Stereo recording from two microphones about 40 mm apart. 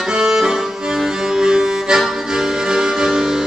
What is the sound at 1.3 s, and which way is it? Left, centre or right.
Music, centre.